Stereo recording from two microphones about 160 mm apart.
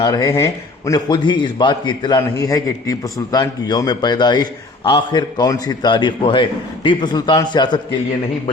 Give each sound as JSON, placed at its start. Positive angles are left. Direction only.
{"t": 0.0, "sound": "a man's voice", "side_deg": 25}